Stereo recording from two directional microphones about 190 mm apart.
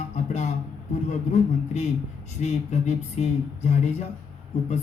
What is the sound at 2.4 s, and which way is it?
Speech, 35° left (ahead or behind).